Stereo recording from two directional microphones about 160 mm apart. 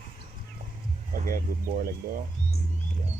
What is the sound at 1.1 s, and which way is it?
Speech, 60° right (ahead or behind).